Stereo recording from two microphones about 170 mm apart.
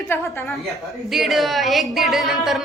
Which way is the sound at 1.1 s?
Centre (ahead or behind).